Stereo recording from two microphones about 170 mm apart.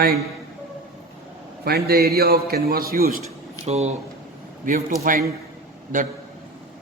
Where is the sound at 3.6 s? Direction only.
40° right (ahead or behind).